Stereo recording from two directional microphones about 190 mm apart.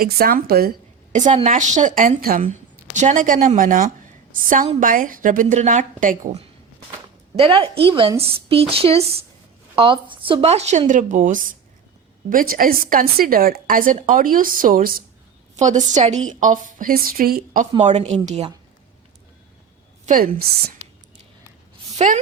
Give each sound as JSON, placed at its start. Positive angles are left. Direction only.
{"t": 0.0, "sound": "a woman's voice", "side_deg": -50}
{"t": 1.1, "sound": "a woman's voice", "side_deg": -40}
{"t": 7.3, "sound": "a woman's voice", "side_deg": -30}
{"t": 20.1, "sound": "a woman's voice", "side_deg": -50}
{"t": 21.9, "sound": "speech", "side_deg": -40}